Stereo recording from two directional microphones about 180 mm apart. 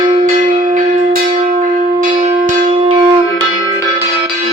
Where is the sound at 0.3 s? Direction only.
50° right (ahead or behind).